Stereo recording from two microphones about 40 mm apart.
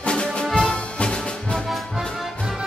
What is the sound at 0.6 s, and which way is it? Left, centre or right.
Music, left.